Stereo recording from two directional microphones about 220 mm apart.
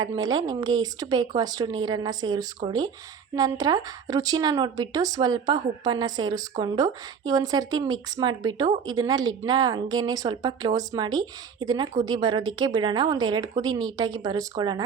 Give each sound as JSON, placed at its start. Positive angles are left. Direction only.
{"t": 0.0, "sound": "a woman's voice", "side_deg": -20}